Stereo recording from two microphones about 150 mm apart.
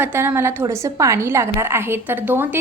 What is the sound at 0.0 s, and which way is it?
A woman's voice, 15° right (ahead or behind).